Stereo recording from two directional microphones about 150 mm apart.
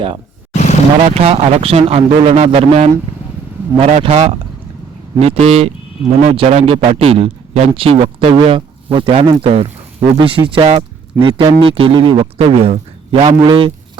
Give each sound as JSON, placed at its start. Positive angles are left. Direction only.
{"t": 0.5, "sound": "vehicle", "side_deg": 50}
{"t": 1.0, "sound": "speech", "side_deg": -45}
{"t": 4.0, "sound": "a man's voice", "side_deg": -40}